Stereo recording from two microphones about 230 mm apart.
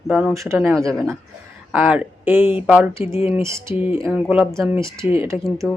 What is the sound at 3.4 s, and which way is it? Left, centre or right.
Speech, centre.